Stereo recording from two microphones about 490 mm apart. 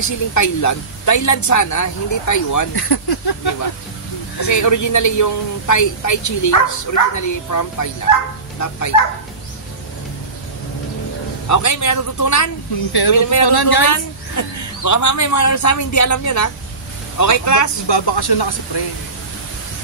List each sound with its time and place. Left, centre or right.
0.0 s speech: left
4.4 s speech: left
11.4 s speech: left
13.5 s speech: left
13.8 s a woman's voice: left
17.8 s speech: left